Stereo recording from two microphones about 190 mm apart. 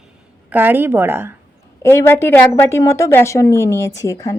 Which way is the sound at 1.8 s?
15° left (ahead or behind).